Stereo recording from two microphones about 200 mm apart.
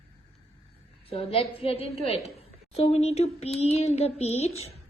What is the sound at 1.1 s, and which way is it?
A child's voice, 30° left (ahead or behind).